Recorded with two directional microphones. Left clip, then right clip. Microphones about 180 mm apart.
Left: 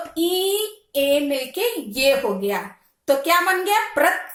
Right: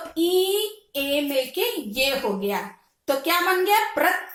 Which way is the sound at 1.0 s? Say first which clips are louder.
Left 4 dB; 35° left (ahead or behind).